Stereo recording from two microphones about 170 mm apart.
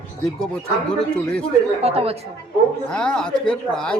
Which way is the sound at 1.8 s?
35° right (ahead or behind).